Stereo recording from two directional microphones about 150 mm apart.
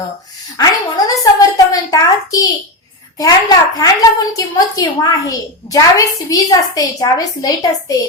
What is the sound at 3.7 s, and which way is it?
A woman's voice, 25° left (ahead or behind).